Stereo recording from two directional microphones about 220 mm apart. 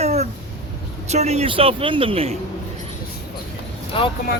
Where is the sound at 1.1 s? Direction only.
30° right (ahead or behind).